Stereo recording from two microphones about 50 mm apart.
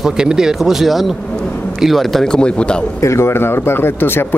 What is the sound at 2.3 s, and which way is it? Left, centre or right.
Speech, centre.